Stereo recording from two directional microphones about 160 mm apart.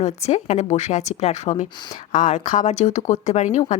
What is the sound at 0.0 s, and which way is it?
Speech, 45° left (ahead or behind).